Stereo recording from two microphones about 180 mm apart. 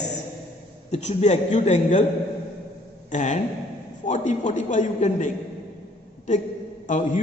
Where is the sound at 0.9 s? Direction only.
40° left (ahead or behind).